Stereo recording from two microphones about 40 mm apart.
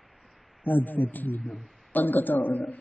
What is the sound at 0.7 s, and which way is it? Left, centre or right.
Speech, left.